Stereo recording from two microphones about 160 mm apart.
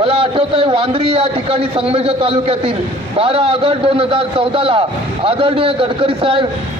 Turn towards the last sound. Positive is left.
turn(degrees=-35)  # may be behind; listen again after turning